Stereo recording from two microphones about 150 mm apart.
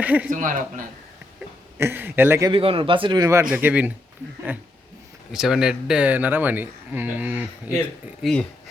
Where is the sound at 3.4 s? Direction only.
10° right (ahead or behind).